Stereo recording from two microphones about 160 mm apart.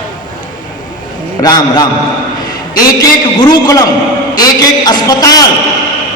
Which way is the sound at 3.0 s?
25° left (ahead or behind).